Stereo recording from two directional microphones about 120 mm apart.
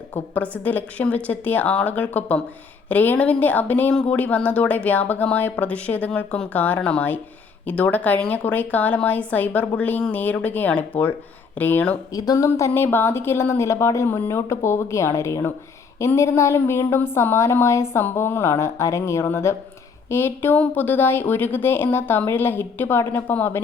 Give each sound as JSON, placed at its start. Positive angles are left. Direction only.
{"t": 0.1, "sound": "speech", "side_deg": 15}
{"t": 12.1, "sound": "speech", "side_deg": 30}